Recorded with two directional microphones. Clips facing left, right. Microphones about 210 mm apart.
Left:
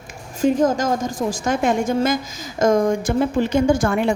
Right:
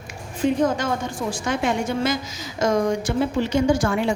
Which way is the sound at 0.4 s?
45° left (ahead or behind).